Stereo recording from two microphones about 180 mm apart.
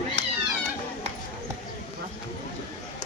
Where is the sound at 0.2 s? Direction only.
80° right.